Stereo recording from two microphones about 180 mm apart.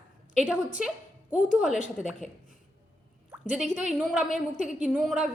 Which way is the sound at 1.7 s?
45° left (ahead or behind).